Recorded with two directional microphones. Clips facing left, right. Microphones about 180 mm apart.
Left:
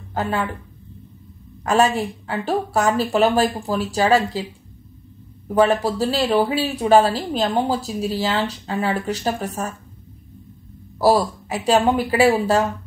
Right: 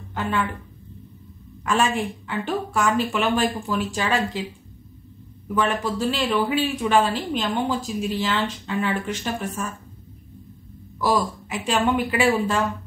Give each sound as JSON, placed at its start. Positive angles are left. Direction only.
{"t": 0.1, "sound": "a woman's voice", "side_deg": 40}
{"t": 1.6, "sound": "speech", "side_deg": 40}
{"t": 5.5, "sound": "speech", "side_deg": 40}
{"t": 11.0, "sound": "speech", "side_deg": 35}